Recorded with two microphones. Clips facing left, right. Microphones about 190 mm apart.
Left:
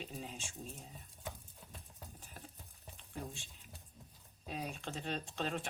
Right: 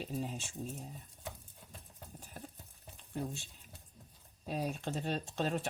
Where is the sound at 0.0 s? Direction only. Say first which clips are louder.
Right 7 dB; 40° right (ahead or behind).